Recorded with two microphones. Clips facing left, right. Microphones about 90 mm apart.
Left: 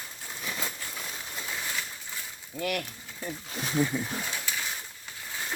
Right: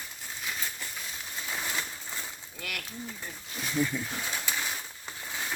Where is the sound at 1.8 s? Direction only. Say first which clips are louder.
Right 1 dB; 30° right (ahead or behind).